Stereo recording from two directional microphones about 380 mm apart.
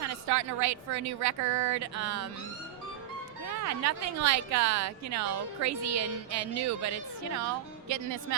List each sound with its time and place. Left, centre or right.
0.0 s a woman's voice: right
3.5 s a woman's voice: right